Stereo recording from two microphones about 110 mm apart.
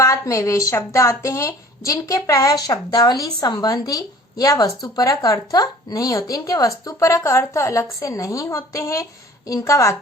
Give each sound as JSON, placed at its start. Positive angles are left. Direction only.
{"t": 0.0, "sound": "speech", "side_deg": 30}